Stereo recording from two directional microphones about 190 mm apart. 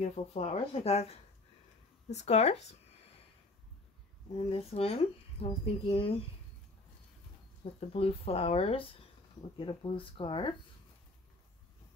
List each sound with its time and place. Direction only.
0.0 s speech: 35° left (ahead or behind)
4.5 s speech: 30° left (ahead or behind)
7.9 s speech: 30° left (ahead or behind)